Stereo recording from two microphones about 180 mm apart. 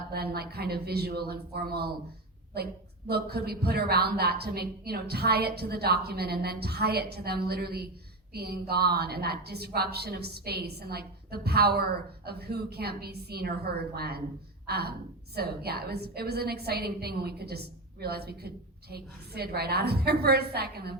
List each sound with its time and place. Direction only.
0.1 s a woman's voice: 60° right (ahead or behind)